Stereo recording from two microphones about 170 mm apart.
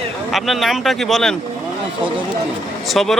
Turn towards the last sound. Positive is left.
turn(degrees=0)  # may be behind; listen again after turning